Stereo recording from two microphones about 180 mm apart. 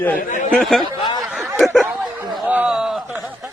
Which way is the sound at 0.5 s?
Centre (ahead or behind).